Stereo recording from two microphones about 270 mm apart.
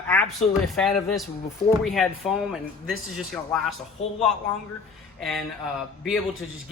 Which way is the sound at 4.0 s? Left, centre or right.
Left.